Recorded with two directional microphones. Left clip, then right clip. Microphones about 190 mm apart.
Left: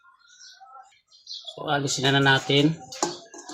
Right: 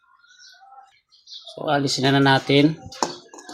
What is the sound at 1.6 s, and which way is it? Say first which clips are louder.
Speech: right 4 dB; 20° right (ahead or behind).